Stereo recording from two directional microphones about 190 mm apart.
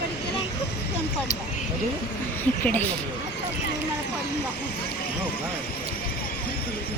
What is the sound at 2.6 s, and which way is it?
Speech, 10° left (ahead or behind).